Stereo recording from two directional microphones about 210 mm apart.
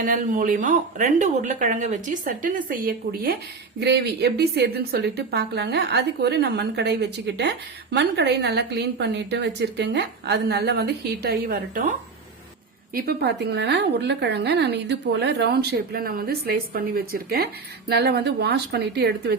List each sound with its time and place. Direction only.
0.0 s a woman's voice: 40° right (ahead or behind)